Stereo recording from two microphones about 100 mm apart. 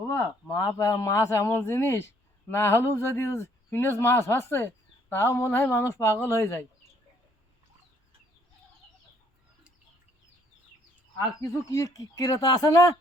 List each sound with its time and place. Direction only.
0.1 s speech: 30° left (ahead or behind)
11.3 s speech: 30° left (ahead or behind)